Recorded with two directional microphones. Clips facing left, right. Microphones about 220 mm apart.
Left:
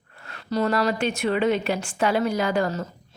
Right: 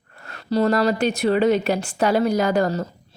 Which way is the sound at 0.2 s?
40° right (ahead or behind).